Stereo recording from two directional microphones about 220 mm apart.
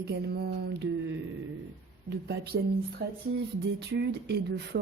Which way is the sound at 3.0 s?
50° right (ahead or behind).